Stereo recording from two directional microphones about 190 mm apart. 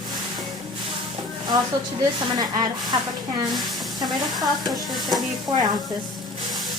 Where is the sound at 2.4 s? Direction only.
20° right (ahead or behind).